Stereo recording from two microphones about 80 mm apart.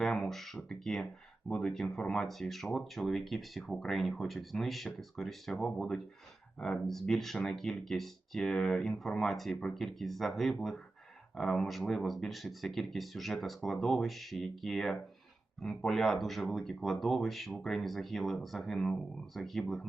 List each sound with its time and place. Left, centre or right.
0.0 s speech: centre